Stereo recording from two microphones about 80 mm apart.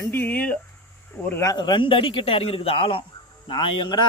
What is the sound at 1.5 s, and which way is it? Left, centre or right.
A man's voice, left.